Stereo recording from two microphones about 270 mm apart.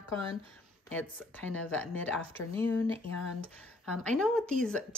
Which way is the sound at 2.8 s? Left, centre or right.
Centre.